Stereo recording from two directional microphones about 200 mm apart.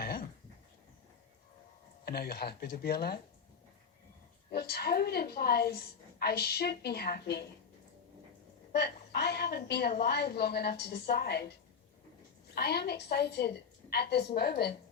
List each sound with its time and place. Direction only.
0.0 s a sound: 50° left (ahead or behind)
2.0 s a woman's voice: 50° left (ahead or behind)
4.5 s a woman's voice: 50° left (ahead or behind)
8.7 s a sound: 55° left (ahead or behind)
10.0 s a woman's voice: 55° left (ahead or behind)
12.5 s a woman's voice: 55° left (ahead or behind)